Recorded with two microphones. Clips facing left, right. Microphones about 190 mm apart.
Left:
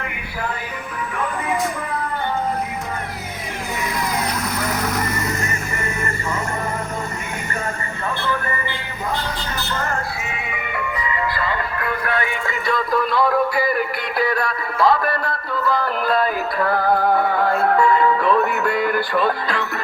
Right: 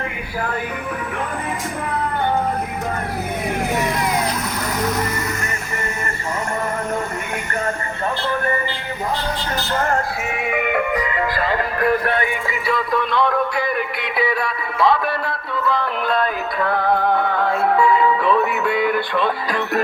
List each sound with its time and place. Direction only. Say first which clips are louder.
9.8 s music: right 4 dB; 55° right (ahead or behind)
12.5 s music: even; 5° right (ahead or behind)